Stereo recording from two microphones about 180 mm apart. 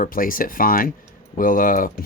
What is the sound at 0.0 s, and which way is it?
Speech, 50° left (ahead or behind).